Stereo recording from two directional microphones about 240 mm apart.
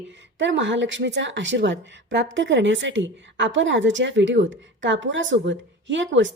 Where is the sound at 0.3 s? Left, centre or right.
Right.